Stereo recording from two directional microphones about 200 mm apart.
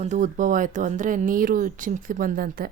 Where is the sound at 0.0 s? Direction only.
40° right (ahead or behind).